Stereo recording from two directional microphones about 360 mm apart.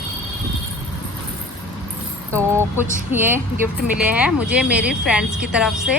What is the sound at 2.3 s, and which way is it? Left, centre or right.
Speech, centre.